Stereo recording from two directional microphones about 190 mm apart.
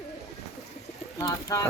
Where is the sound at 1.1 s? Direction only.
15° left (ahead or behind).